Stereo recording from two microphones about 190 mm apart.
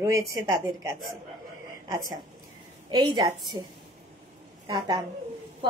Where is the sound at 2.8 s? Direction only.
20° right (ahead or behind).